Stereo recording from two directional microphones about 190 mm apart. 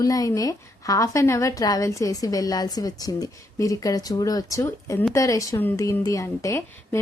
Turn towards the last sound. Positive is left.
turn(degrees=15)  # may be behind; listen again after turning